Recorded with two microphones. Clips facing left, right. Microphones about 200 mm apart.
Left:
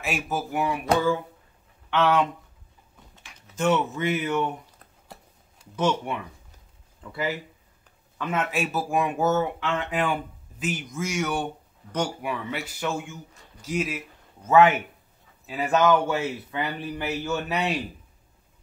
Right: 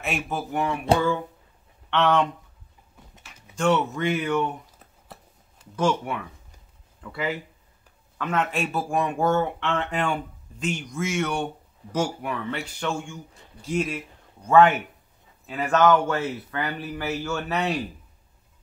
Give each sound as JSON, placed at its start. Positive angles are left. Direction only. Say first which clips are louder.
{"t": 0.0, "sound": "speech", "louder": "even", "side_deg": 0}
{"t": 1.9, "sound": "speech", "louder": "even", "side_deg": 5}
{"t": 3.2, "sound": "a sound", "louder": "even", "side_deg": -5}
{"t": 3.7, "sound": "speech", "louder": "right 1 dB", "side_deg": 5}
{"t": 4.7, "sound": "a sound", "louder": "even", "side_deg": -5}
{"t": 5.8, "sound": "speech", "louder": "right 1 dB", "side_deg": 20}
{"t": 7.0, "sound": "a man's voice", "louder": "even", "side_deg": 10}